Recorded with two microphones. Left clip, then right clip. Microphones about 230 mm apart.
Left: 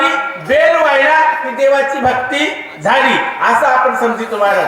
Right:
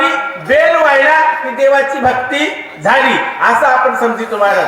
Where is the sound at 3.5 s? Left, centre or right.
Centre.